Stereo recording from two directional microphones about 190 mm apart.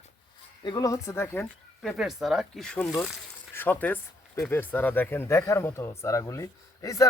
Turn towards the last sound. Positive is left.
turn(degrees=15)  # may be behind; listen again after turning